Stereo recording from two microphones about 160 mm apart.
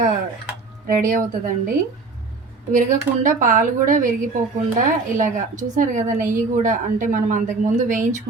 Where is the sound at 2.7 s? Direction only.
55° right (ahead or behind).